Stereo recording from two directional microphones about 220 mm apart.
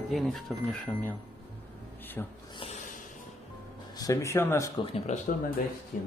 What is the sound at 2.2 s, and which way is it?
Speech, 10° left (ahead or behind).